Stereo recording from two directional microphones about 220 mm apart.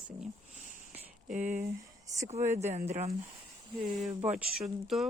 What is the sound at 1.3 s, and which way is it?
Speech, 35° right (ahead or behind).